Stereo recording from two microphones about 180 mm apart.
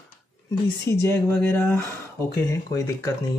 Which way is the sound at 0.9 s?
15° left (ahead or behind).